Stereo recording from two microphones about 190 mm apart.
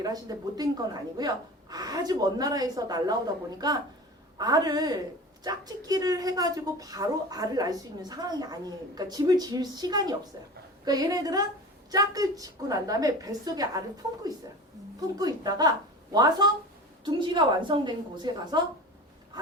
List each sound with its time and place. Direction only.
0.0 s a woman's voice: 20° right (ahead or behind)